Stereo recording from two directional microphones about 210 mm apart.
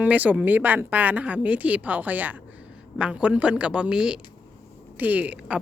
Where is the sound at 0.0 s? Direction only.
5° right (ahead or behind).